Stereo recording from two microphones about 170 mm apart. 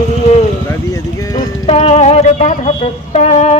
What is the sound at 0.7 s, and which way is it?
Speech, 20° left (ahead or behind).